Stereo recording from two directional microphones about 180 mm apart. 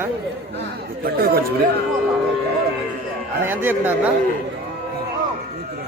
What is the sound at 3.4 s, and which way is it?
Speech, 10° right (ahead or behind).